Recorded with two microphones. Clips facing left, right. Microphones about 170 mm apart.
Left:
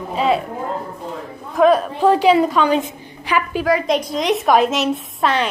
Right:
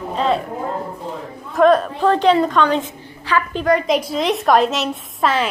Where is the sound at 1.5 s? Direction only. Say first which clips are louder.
Even; 5° left (ahead or behind).